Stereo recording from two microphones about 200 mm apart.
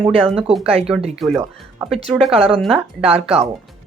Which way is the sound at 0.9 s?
5° right (ahead or behind).